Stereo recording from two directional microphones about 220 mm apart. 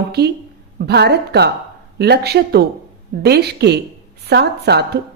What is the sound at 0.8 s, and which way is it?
A woman's voice, 50° right (ahead or behind).